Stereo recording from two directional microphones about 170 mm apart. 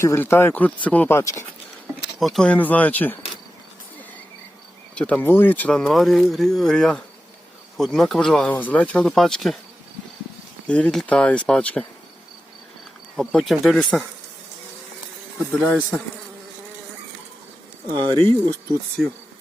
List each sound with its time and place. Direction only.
0.0 s speech: 15° left (ahead or behind)
2.1 s speech: centre (ahead or behind)
4.9 s speech: 5° left (ahead or behind)
10.7 s speech: 5° left (ahead or behind)
13.1 s speech: 5° left (ahead or behind)
15.6 s speech: 10° left (ahead or behind)
17.9 s speech: 30° right (ahead or behind)